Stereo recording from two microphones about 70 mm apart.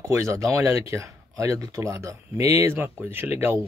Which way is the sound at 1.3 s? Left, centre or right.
Right.